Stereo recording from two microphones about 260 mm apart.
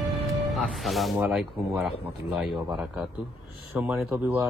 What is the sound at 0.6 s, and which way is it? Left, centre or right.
Speech, centre.